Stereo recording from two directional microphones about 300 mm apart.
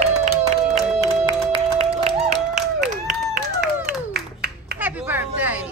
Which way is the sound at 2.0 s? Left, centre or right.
Right.